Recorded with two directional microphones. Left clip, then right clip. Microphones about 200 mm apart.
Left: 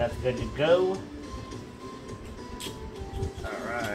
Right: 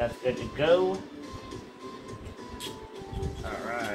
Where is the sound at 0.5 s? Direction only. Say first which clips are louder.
Even; 25° right (ahead or behind).